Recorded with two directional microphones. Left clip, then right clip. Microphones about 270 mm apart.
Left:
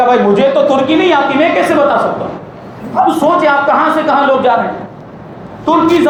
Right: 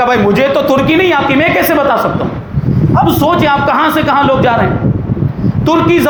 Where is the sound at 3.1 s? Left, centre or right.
Right.